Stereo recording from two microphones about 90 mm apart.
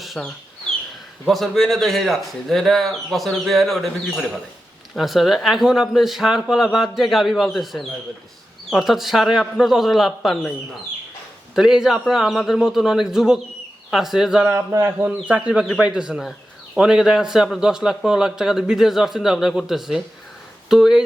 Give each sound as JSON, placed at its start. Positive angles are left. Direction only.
{"t": 0.2, "sound": "speech", "side_deg": 15}
{"t": 1.3, "sound": "a man's voice", "side_deg": 0}
{"t": 11.5, "sound": "a man's voice", "side_deg": -5}
{"t": 14.7, "sound": "speech", "side_deg": -25}
{"t": 15.0, "sound": "a man's voice", "side_deg": -15}